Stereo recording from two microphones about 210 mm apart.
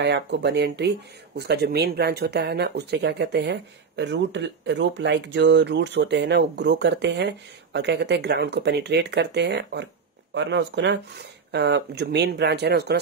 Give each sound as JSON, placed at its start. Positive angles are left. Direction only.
{"t": 0.0, "sound": "speech", "side_deg": -55}